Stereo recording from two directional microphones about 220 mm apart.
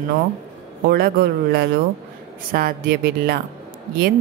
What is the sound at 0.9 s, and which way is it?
Speech, 45° right (ahead or behind).